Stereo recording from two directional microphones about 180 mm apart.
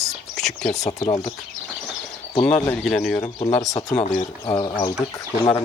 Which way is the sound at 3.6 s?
20° left (ahead or behind).